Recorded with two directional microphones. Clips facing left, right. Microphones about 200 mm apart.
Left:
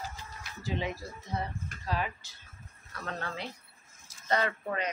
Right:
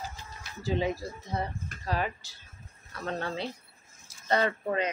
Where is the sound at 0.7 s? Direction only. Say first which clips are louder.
Right 5 dB; 35° right (ahead or behind).